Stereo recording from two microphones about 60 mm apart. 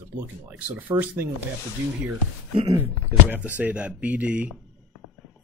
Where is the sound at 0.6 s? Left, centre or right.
Right.